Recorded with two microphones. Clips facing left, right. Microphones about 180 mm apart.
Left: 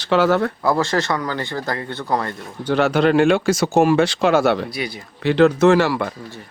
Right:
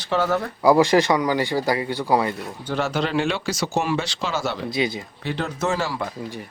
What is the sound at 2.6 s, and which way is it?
A man's voice, 65° left (ahead or behind).